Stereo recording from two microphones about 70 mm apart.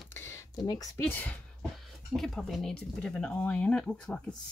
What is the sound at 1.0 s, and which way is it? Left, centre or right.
Speech, left.